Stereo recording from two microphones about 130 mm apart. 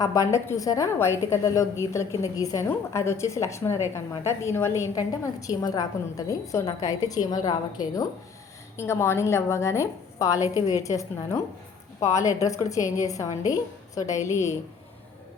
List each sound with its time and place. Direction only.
0.0 s a woman's voice: 25° left (ahead or behind)